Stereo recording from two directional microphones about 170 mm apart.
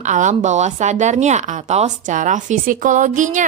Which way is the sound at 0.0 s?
45° right (ahead or behind).